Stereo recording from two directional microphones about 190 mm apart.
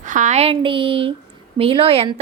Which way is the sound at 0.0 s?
40° right (ahead or behind).